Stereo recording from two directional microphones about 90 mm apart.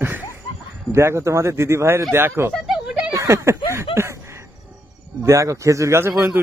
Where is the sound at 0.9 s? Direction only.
30° right (ahead or behind).